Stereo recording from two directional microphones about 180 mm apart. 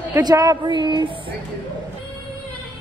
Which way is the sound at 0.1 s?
20° right (ahead or behind).